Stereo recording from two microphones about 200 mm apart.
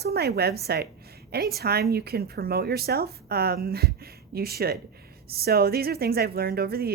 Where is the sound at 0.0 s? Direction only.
50° right (ahead or behind).